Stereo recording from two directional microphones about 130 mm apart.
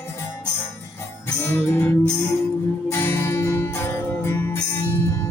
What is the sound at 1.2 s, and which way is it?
Music, 20° left (ahead or behind).